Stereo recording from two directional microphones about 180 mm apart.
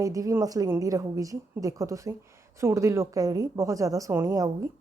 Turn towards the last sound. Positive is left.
turn(degrees=-15)  # may be behind; listen again after turning